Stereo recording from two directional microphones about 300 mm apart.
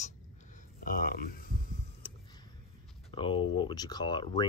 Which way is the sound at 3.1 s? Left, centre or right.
Centre.